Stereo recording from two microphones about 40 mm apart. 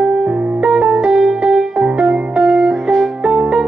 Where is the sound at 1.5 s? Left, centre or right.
Centre.